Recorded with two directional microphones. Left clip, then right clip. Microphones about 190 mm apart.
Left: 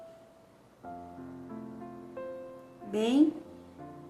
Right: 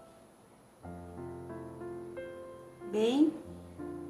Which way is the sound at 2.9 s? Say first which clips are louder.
Left 1 dB; 25° left (ahead or behind).